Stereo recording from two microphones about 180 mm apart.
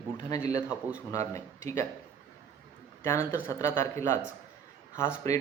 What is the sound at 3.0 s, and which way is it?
A man's voice, 15° left (ahead or behind).